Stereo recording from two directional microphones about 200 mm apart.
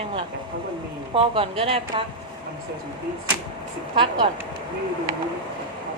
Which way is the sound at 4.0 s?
25° right (ahead or behind).